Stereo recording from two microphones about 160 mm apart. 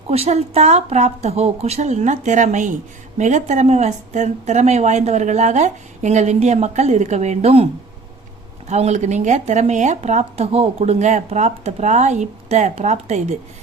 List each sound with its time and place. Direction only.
0.1 s speech: 40° right (ahead or behind)